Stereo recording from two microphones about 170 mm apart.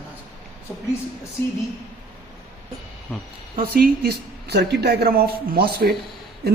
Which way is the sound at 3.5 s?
60° right (ahead or behind).